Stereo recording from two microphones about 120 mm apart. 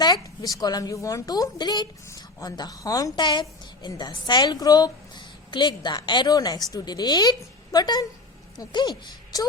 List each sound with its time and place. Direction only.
0.0 s a woman's voice: 35° left (ahead or behind)